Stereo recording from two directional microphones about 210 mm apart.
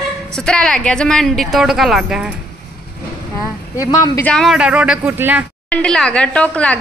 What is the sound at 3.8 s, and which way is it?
Speech, 15° left (ahead or behind).